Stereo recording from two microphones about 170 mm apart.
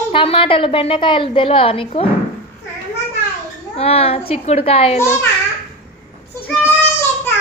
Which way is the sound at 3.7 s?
35° left (ahead or behind).